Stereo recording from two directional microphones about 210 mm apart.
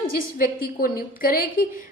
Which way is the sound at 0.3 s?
45° left (ahead or behind).